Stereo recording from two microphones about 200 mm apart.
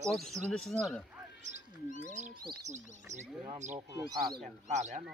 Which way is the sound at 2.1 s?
35° right (ahead or behind).